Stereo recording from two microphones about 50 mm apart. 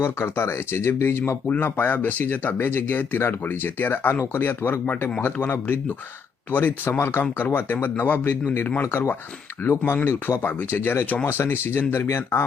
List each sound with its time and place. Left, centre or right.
0.0 s speech: left
1.5 s speech: left
9.8 s speech: left